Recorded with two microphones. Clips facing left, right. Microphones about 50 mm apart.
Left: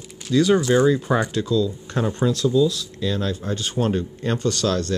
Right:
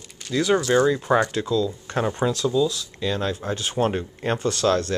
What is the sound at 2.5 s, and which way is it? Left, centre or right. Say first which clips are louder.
Speech: left 3 dB; centre.